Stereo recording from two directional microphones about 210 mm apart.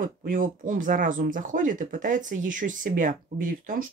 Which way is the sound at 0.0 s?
40° right (ahead or behind).